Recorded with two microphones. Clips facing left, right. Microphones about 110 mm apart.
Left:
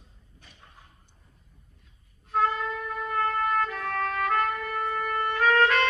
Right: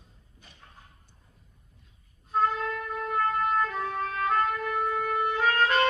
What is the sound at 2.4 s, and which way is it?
Music, centre (ahead or behind).